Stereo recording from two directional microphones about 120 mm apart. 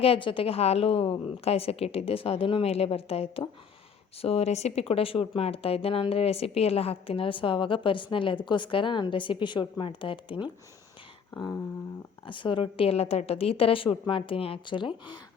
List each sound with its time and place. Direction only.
0.0 s a woman's voice: 50° left (ahead or behind)
12.2 s speech: 45° left (ahead or behind)